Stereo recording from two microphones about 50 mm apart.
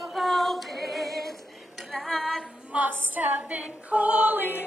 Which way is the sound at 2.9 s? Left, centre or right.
Right.